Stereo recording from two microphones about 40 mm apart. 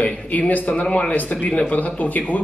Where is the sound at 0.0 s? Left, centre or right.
Left.